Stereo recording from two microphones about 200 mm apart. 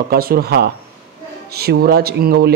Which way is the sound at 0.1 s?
50° right (ahead or behind).